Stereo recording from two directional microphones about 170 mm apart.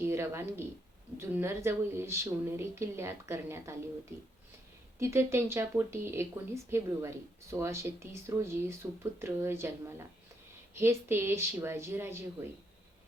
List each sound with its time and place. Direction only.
0.0 s a woman's voice: 15° right (ahead or behind)
4.9 s a woman's voice: 15° right (ahead or behind)